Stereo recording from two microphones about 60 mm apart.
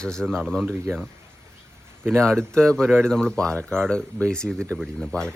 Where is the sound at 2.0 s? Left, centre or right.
Right.